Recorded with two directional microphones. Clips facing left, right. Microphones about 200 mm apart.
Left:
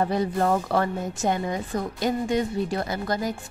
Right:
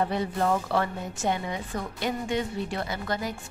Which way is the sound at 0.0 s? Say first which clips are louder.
Left 3 dB; 40° left (ahead or behind).